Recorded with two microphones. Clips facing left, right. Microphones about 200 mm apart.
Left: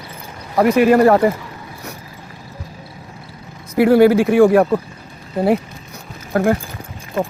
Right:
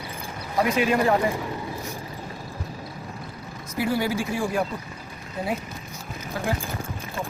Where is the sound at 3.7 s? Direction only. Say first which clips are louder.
Left 14 dB; 60° left (ahead or behind).